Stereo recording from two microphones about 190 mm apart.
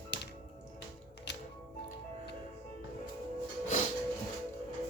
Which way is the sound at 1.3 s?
65° left (ahead or behind).